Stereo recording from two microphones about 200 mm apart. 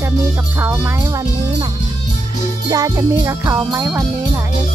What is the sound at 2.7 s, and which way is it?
Jingle bell, 15° right (ahead or behind).